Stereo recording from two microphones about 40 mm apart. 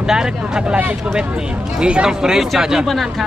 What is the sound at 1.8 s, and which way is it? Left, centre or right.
Speech, right.